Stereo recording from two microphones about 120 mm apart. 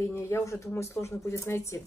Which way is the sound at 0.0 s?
20° left (ahead or behind).